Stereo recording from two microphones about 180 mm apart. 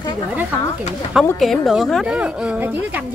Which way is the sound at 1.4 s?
Centre (ahead or behind).